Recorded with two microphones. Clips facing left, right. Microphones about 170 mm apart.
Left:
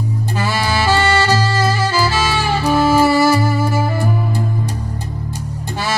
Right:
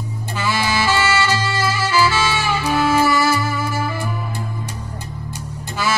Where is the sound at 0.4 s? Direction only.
35° left (ahead or behind).